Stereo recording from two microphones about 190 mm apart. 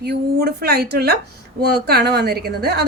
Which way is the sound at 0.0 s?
60° right (ahead or behind).